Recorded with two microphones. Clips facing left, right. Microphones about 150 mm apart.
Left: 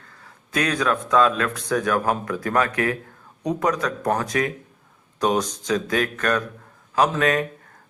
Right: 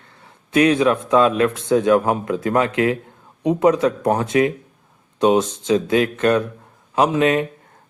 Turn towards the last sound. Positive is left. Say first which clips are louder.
# right 3 dB
turn(degrees=-20)  # may be behind; listen again after turning